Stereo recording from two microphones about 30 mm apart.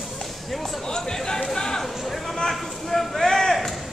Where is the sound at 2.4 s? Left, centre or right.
Centre.